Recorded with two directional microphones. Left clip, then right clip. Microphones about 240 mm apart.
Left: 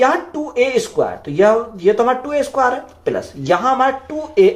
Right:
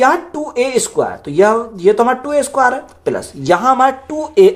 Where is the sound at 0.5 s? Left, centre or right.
Right.